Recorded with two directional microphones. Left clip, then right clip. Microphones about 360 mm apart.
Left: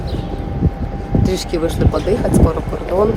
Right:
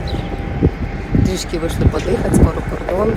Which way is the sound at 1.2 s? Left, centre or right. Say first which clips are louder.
Left 2 dB; centre.